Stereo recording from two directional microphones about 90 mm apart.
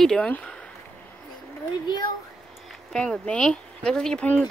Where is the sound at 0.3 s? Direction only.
15° left (ahead or behind).